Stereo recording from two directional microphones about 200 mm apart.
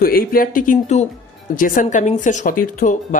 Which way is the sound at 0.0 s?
45° left (ahead or behind).